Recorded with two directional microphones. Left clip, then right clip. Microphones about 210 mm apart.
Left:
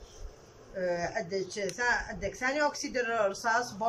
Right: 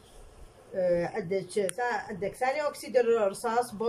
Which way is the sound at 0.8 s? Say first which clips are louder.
Right 4 dB; 20° right (ahead or behind).